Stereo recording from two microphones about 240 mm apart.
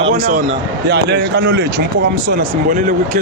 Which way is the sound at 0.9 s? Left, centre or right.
Right.